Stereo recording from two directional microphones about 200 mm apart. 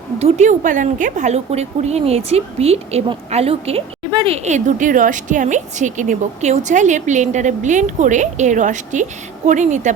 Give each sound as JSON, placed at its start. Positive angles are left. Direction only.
{"t": 0.2, "sound": "a woman's voice", "side_deg": -35}
{"t": 4.4, "sound": "a woman's voice", "side_deg": -40}